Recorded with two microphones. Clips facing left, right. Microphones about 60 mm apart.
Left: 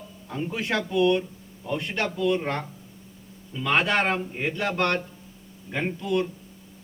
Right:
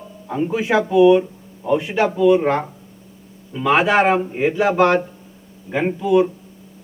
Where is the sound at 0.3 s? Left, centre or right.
Centre.